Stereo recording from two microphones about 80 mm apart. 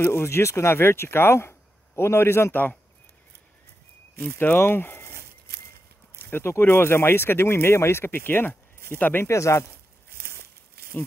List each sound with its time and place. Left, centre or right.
0.0 s speech: left
4.4 s speech: left
6.1 s speech: left
10.4 s crumpling: left